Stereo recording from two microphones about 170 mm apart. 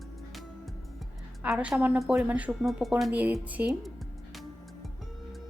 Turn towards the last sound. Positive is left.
turn(degrees=0)  # may be behind; listen again after turning